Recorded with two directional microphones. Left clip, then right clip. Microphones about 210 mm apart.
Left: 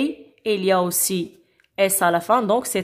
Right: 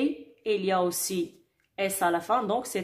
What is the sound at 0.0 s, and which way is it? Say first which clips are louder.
A woman's voice: left 5 dB; 40° left (ahead or behind).